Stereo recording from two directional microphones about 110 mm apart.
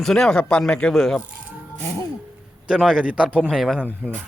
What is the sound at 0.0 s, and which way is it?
Speech, 5° left (ahead or behind).